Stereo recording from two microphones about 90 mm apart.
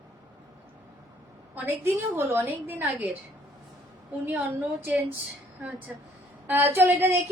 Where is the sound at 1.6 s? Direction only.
25° right (ahead or behind).